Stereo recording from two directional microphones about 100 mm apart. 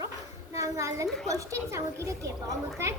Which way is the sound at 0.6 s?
30° right (ahead or behind).